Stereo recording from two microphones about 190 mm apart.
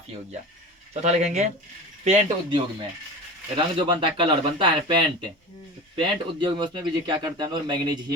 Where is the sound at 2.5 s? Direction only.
25° right (ahead or behind).